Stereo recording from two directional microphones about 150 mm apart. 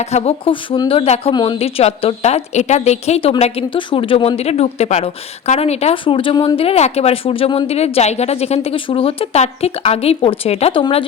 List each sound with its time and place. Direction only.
0.0 s a woman's voice: 45° left (ahead or behind)
1.3 s a woman's voice: 30° left (ahead or behind)
6.6 s a woman's voice: 45° left (ahead or behind)